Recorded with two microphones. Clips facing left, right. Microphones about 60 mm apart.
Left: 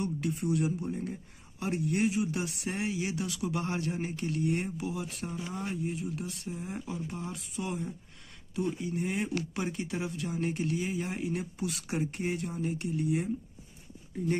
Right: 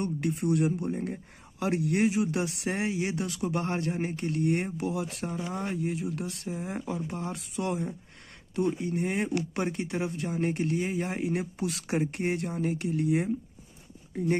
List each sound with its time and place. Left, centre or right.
0.0 s speech: right
1.6 s speech: right
4.9 s speech: right
5.5 s speech: right
5.8 s speech: right
7.0 s speech: right
8.8 s speech: right
11.6 s speech: right